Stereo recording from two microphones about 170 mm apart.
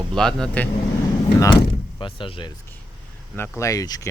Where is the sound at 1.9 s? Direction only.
30° left (ahead or behind).